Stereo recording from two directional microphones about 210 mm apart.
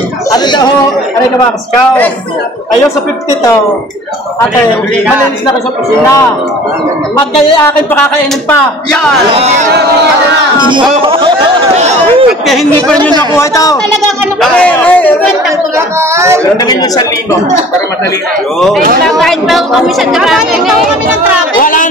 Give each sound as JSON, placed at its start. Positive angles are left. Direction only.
{"t": 0.3, "sound": "a sound", "side_deg": 20}
{"t": 9.3, "sound": "speech", "side_deg": -30}
{"t": 11.0, "sound": "a sound", "side_deg": -25}
{"t": 12.4, "sound": "a woman's voice", "side_deg": 0}
{"t": 13.3, "sound": "a man's voice", "side_deg": 15}
{"t": 16.0, "sound": "a woman's voice", "side_deg": -15}
{"t": 19.0, "sound": "a woman's voice", "side_deg": 0}
{"t": 21.5, "sound": "a woman's voice", "side_deg": 40}